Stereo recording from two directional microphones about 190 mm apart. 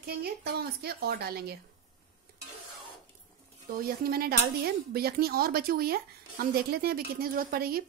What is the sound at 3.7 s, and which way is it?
Speech, 50° right (ahead or behind).